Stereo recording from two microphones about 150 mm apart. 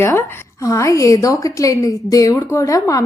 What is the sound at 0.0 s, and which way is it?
A woman's voice, 20° left (ahead or behind).